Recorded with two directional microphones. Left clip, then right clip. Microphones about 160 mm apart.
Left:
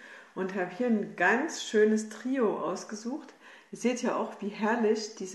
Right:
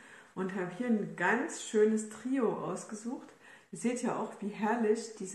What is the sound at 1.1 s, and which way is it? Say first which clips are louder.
Speech: left 5 dB; 10° right (ahead or behind).